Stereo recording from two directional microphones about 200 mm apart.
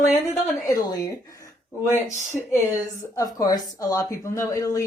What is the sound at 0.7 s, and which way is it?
A woman's voice, 20° left (ahead or behind).